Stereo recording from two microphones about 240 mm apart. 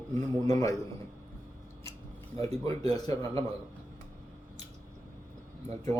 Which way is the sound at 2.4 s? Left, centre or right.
Right.